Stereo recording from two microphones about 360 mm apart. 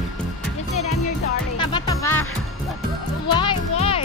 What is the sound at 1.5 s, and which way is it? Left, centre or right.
Music, centre.